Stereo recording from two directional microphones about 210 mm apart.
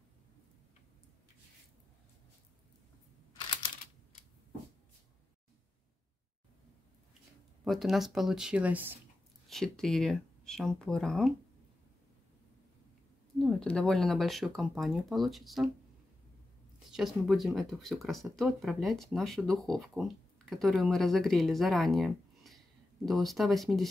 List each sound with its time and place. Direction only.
7.6 s speech: centre (ahead or behind)
9.5 s speech: centre (ahead or behind)
13.4 s speech: 5° left (ahead or behind)
16.9 s speech: centre (ahead or behind)